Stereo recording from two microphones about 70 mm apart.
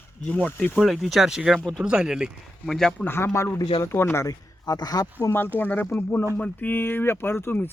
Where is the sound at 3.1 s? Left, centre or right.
Left.